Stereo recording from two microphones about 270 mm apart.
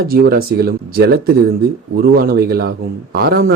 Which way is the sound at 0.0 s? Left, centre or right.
Right.